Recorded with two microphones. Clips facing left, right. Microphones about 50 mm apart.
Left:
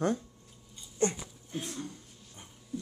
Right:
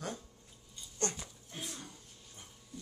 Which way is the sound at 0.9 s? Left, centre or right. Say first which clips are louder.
Left 8 dB; centre.